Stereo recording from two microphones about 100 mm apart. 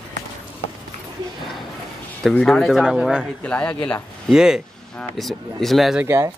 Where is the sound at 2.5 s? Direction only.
Centre (ahead or behind).